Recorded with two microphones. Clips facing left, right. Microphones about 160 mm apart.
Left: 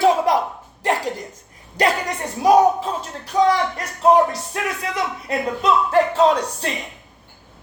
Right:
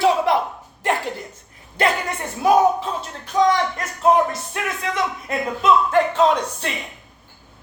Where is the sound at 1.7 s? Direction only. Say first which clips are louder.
Left 1 dB; 35° left (ahead or behind).